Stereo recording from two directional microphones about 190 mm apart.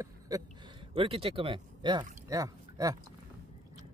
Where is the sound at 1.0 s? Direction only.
30° right (ahead or behind).